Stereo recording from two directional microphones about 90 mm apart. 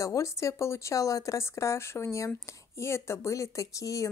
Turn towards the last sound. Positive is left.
turn(degrees=40)  # may be behind; listen again after turning